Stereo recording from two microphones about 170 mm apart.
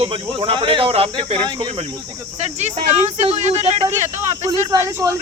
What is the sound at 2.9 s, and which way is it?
Speech, 35° right (ahead or behind).